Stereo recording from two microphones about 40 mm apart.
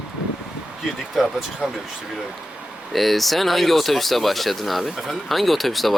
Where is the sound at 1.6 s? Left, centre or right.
Right.